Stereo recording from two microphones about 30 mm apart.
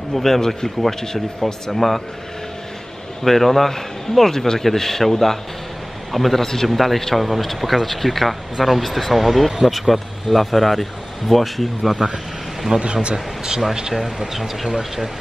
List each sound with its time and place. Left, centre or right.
0.1 s speech: centre
3.3 s speech: centre
6.4 s speech: centre
12.7 s a man's voice: right
14.2 s speech: centre